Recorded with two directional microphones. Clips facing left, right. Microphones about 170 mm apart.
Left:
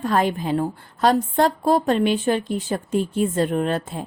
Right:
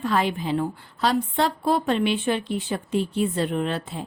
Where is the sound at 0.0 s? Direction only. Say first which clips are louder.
Left 3 dB; 45° left (ahead or behind).